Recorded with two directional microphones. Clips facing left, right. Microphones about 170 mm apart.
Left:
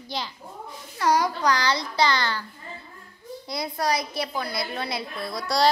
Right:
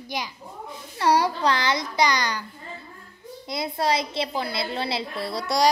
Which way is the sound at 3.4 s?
25° right (ahead or behind).